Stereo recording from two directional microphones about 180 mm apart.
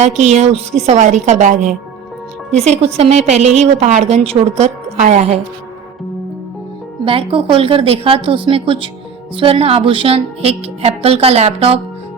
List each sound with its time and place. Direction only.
0.3 s a woman's voice: 35° right (ahead or behind)
7.0 s a woman's voice: 30° right (ahead or behind)